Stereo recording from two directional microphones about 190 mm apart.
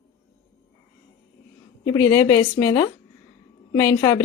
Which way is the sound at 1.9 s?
20° left (ahead or behind).